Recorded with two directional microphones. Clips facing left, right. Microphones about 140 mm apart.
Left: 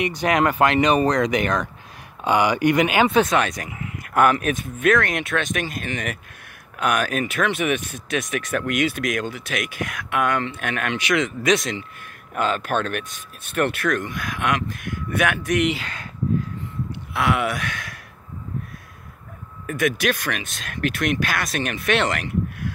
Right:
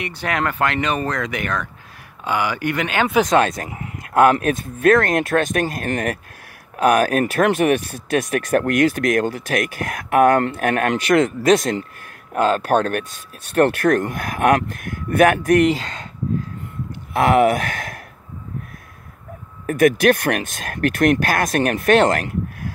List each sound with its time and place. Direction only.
0.0 s speech: 15° left (ahead or behind)
3.3 s speech: 25° right (ahead or behind); by 14.1 s 50° right (ahead or behind)
15.1 s speech: 45° right (ahead or behind)
17.1 s speech: 45° right (ahead or behind)
19.6 s speech: 60° right (ahead or behind); by 22.7 s 45° right (ahead or behind)